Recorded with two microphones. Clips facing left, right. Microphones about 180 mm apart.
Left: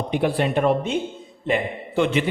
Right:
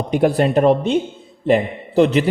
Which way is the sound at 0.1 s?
45° right (ahead or behind).